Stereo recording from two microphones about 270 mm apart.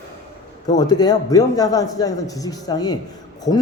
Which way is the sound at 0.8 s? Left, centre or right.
Centre.